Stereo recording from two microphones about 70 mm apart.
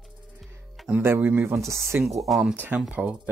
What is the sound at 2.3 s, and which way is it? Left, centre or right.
Speech, centre.